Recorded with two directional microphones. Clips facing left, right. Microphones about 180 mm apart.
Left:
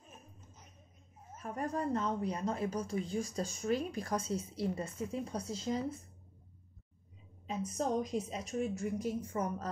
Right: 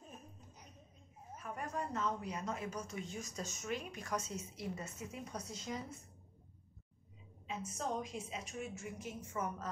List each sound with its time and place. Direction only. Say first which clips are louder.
1.4 s speech: left 6 dB; 35° left (ahead or behind)
7.4 s speech: left 6 dB; 40° left (ahead or behind)